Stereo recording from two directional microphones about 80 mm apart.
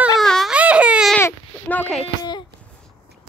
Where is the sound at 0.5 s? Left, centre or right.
Centre.